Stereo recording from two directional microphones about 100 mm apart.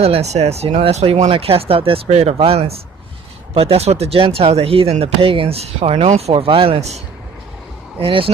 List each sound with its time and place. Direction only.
0.0 s speech: 90° right
3.5 s speech: 75° right (ahead or behind); by 7.0 s 90° right
7.9 s speech: 65° right (ahead or behind)